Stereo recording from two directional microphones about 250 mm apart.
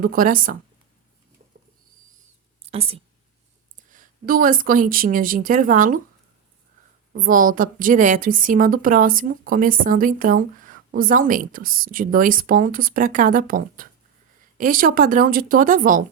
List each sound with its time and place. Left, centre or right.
0.0 s a woman's voice: right
2.6 s a woman's voice: right
7.1 s a woman's voice: right